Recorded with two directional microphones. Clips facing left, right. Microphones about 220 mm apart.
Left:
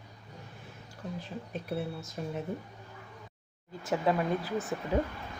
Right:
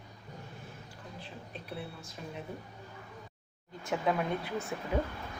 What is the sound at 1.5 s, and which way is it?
Speech, 45° left (ahead or behind).